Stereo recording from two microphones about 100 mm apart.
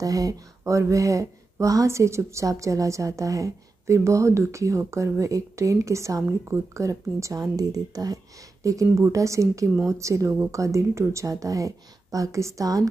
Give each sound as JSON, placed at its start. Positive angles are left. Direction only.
{"t": 0.0, "sound": "speech", "side_deg": -35}